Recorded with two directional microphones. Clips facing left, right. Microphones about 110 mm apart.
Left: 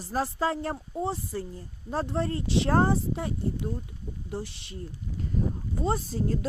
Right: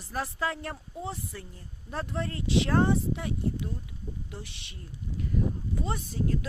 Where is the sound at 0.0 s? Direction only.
30° left (ahead or behind).